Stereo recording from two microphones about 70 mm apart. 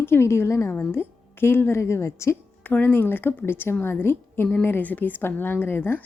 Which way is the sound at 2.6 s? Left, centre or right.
Left.